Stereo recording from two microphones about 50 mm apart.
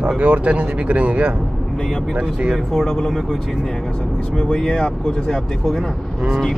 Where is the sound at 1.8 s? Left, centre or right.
Centre.